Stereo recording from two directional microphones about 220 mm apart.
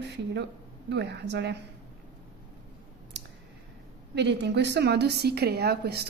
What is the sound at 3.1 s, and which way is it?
Clicking, 50° right (ahead or behind).